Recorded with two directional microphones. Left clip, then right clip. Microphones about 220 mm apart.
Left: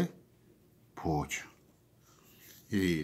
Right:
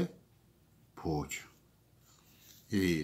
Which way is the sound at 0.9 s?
20° left (ahead or behind).